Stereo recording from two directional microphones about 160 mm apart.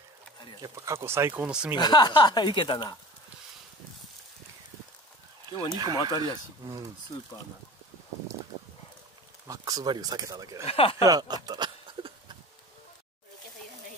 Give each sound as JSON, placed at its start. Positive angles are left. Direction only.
{"t": 0.6, "sound": "speech", "side_deg": -20}
{"t": 1.8, "sound": "a woman's voice", "side_deg": 25}
{"t": 5.5, "sound": "speech", "side_deg": 25}
{"t": 5.8, "sound": "speech", "side_deg": -25}
{"t": 9.5, "sound": "speech", "side_deg": -25}
{"t": 10.6, "sound": "speech", "side_deg": 40}
{"t": 11.1, "sound": "a sound", "side_deg": -25}